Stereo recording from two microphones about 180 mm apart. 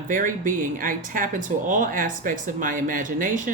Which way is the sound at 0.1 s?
50° right (ahead or behind).